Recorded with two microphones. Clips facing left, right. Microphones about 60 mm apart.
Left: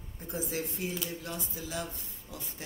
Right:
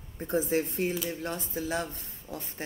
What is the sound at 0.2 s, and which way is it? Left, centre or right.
Speech, right.